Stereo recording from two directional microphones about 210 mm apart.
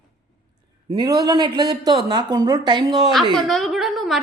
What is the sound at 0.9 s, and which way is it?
Speech, 20° right (ahead or behind).